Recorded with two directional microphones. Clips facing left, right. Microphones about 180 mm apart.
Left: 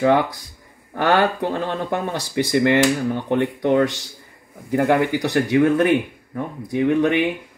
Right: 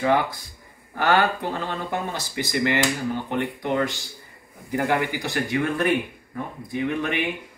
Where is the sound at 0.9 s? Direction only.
60° left (ahead or behind).